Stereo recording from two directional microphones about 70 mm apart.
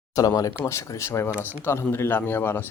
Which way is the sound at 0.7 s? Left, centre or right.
Left.